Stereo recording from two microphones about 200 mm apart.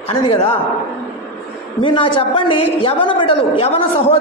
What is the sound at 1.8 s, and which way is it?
A man's voice, 25° left (ahead or behind).